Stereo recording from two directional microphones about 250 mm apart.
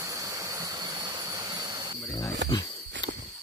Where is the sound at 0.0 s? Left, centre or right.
Centre.